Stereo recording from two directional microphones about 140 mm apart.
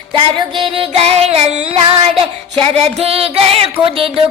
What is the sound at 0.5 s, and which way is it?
Child singing, 40° right (ahead or behind).